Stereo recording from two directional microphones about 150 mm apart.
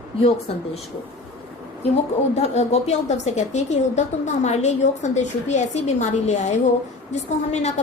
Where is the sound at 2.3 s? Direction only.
45° left (ahead or behind).